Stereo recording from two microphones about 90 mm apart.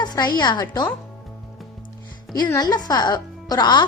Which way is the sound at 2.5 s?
50° left (ahead or behind).